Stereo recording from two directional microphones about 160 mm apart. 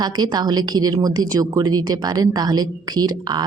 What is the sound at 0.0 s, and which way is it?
Speech, 25° right (ahead or behind).